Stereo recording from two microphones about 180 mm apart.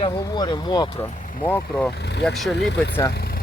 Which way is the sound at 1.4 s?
10° left (ahead or behind).